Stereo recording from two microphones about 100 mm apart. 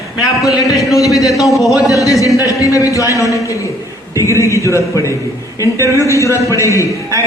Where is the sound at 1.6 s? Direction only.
35° left (ahead or behind).